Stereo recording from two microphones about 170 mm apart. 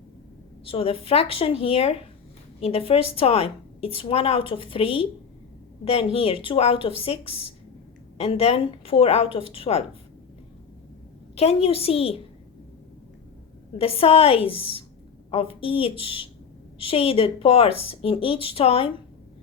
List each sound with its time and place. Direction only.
0.6 s a woman's voice: 35° left (ahead or behind)
11.3 s a woman's voice: 35° left (ahead or behind)
13.7 s a woman's voice: 35° left (ahead or behind)